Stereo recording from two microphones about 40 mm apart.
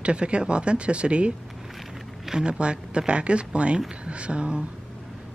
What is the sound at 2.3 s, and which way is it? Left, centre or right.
Speech, right.